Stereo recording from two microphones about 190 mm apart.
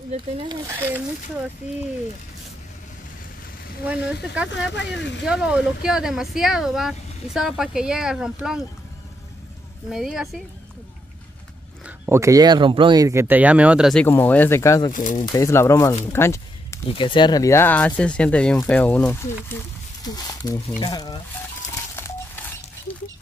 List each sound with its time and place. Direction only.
3.8 s speech: 5° right (ahead or behind)
4.7 s speech: 70° left (ahead or behind)
5.2 s speech: 5° right (ahead or behind)
9.8 s speech: centre (ahead or behind)
11.8 s speech: 15° right (ahead or behind)
14.0 s speech: 10° left (ahead or behind)
14.9 s speech: 45° left (ahead or behind)
15.3 s speech: 15° left (ahead or behind)
16.1 s a sound: 15° left (ahead or behind)
16.9 s speech: 25° left (ahead or behind)
21.9 s telephone dialing: 10° left (ahead or behind)